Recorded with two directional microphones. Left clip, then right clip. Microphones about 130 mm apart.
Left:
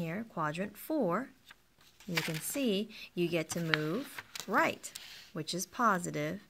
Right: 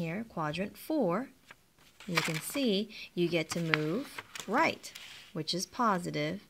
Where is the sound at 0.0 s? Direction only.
25° right (ahead or behind).